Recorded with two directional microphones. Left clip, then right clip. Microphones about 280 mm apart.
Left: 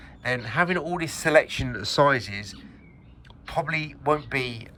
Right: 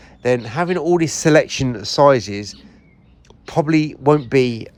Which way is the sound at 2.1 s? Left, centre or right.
Right.